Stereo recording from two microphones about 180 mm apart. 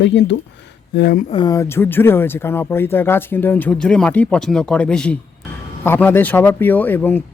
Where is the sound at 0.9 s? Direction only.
60° left (ahead or behind).